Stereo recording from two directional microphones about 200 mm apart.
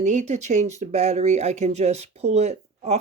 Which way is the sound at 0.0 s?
35° right (ahead or behind).